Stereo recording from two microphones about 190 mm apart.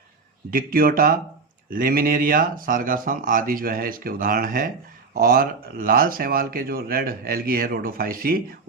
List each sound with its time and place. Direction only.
0.5 s speech: 50° right (ahead or behind)